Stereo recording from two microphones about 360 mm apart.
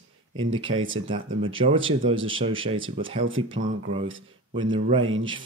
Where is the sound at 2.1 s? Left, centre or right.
Right.